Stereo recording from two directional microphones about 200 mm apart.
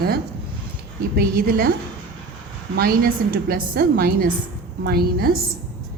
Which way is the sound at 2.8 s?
50° right (ahead or behind).